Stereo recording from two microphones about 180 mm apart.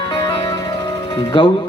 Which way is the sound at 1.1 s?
25° left (ahead or behind).